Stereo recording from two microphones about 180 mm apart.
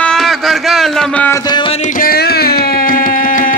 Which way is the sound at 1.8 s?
50° left (ahead or behind).